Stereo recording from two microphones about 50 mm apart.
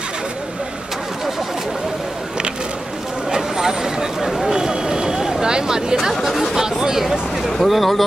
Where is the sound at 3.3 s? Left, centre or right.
Centre.